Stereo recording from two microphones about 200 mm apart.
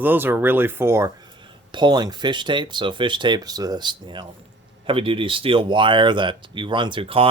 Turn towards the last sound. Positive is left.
turn(degrees=-25)  # may be behind; listen again after turning